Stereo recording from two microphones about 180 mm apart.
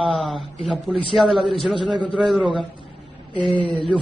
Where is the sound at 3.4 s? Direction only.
Centre (ahead or behind).